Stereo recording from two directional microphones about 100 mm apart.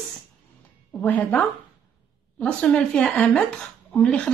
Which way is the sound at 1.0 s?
15° left (ahead or behind).